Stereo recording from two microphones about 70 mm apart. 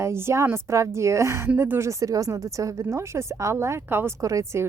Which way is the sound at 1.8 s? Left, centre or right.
Right.